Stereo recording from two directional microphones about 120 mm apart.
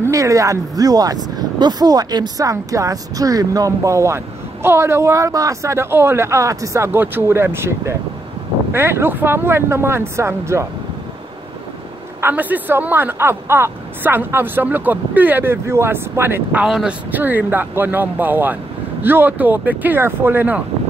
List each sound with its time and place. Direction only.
0.0 s speech: 25° right (ahead or behind)
12.2 s speech: 15° right (ahead or behind)
16.6 s speech: 5° right (ahead or behind)